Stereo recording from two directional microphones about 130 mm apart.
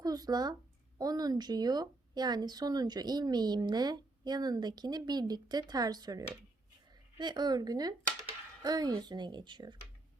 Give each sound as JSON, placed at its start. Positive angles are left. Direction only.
{"t": 0.0, "sound": "a woman's voice", "side_deg": -30}